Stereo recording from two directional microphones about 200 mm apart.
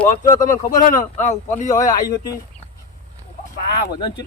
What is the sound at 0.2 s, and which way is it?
Speech, 40° left (ahead or behind).